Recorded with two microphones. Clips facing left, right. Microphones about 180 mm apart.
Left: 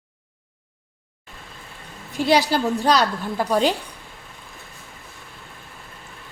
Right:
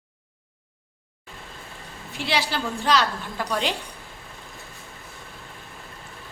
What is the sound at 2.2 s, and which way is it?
A woman's voice, 40° left (ahead or behind).